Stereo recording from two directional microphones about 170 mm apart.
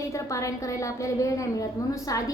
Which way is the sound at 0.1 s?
20° left (ahead or behind).